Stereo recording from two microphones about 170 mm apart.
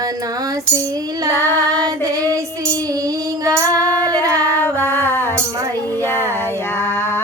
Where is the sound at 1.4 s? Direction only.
15° left (ahead or behind).